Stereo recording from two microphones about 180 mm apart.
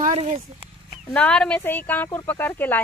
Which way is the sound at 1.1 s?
10° left (ahead or behind).